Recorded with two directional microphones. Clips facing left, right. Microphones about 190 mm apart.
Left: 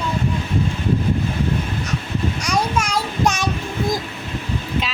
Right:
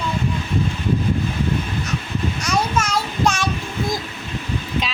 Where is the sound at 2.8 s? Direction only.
10° left (ahead or behind).